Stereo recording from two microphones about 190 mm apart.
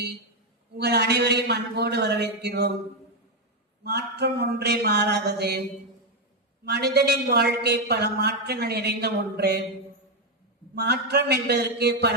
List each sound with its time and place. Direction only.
0.8 s a woman's voice: 60° right (ahead or behind)
3.8 s a woman's voice: 60° right (ahead or behind)
6.7 s a woman's voice: 55° right (ahead or behind)
10.8 s a woman's voice: 60° right (ahead or behind)